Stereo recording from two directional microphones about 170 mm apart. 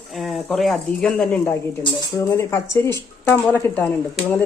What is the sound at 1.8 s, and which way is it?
Speech, 25° left (ahead or behind).